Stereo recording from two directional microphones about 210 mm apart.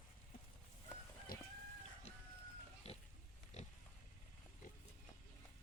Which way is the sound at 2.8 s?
30° left (ahead or behind).